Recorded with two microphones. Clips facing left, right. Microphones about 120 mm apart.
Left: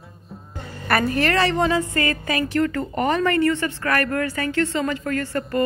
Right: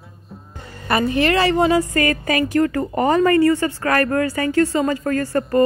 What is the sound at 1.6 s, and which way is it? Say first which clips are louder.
Speech: right 4 dB; 40° right (ahead or behind).